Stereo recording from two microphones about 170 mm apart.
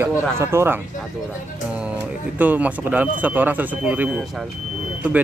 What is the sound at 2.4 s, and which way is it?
Speech, 10° right (ahead or behind).